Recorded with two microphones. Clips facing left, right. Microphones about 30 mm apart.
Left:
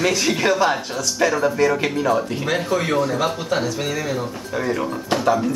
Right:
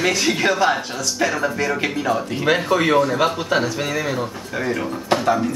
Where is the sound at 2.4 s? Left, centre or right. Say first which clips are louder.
Right 6 dB; right.